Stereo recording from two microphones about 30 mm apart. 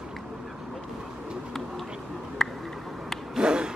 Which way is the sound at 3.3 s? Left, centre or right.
Right.